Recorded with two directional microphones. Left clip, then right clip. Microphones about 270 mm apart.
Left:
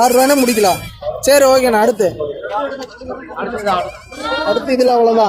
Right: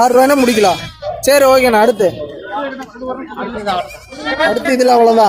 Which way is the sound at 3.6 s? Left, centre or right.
Centre.